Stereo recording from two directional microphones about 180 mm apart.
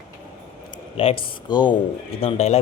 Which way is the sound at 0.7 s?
30° left (ahead or behind).